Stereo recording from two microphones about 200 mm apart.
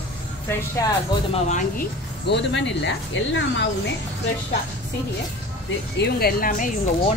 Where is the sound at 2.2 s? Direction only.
60° left (ahead or behind).